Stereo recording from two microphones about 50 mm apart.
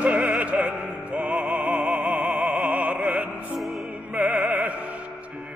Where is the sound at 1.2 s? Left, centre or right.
Right.